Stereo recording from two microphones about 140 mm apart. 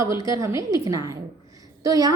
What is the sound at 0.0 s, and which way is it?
A woman's voice, 20° right (ahead or behind).